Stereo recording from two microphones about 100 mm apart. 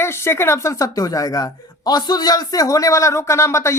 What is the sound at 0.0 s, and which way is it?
Speech, 25° left (ahead or behind).